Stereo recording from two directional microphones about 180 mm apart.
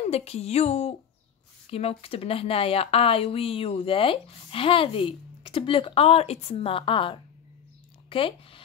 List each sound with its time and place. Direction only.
0.1 s speech: 35° left (ahead or behind)